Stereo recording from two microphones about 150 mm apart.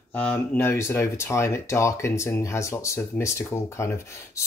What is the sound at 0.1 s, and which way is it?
Speech, 10° left (ahead or behind).